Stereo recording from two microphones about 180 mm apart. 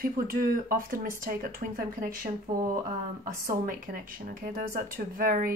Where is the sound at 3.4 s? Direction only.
55° right (ahead or behind).